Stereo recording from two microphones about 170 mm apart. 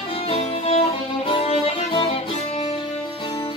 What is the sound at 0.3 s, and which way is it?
Music, 40° left (ahead or behind).